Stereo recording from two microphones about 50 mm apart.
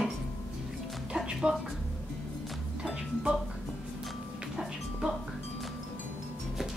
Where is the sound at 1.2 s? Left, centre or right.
Centre.